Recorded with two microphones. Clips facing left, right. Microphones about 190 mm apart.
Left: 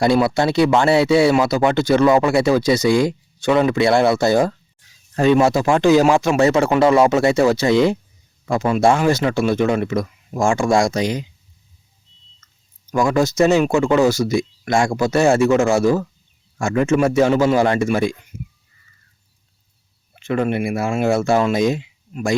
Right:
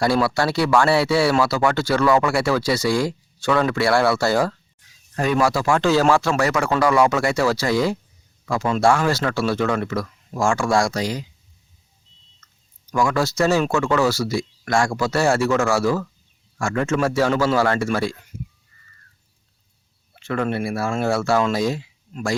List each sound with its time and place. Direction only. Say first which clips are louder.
0.0 s speech: left 4 dB; 20° left (ahead or behind)
13.1 s speech: left 6 dB; 20° left (ahead or behind)
20.1 s speech: left 4 dB; 20° left (ahead or behind)